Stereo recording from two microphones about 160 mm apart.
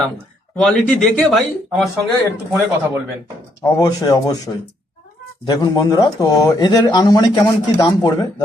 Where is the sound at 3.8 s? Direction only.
25° left (ahead or behind).